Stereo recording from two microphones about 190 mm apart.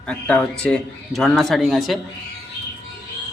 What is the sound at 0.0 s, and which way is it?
Speech, 5° left (ahead or behind).